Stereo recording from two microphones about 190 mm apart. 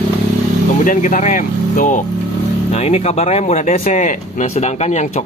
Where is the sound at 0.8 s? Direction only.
40° left (ahead or behind).